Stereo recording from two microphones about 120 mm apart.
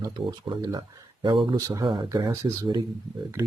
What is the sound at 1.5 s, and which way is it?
Speech, 30° right (ahead or behind).